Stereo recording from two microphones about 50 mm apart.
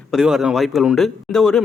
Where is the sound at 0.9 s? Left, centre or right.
Centre.